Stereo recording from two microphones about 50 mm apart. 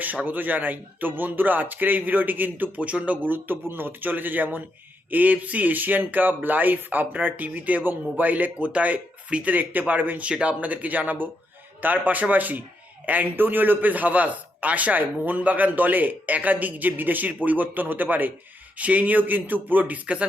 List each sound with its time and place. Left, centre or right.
0.0 s a man's voice: right
10.2 s a man's voice: right